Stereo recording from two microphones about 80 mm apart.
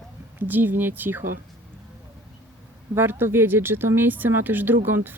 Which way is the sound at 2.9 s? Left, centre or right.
Right.